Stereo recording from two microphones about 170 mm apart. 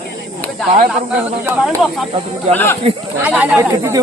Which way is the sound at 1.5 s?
Centre (ahead or behind).